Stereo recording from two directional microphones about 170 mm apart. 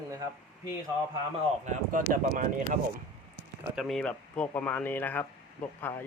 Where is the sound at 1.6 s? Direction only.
50° right (ahead or behind).